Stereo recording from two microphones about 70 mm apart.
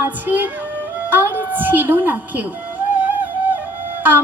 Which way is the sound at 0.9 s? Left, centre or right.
Right.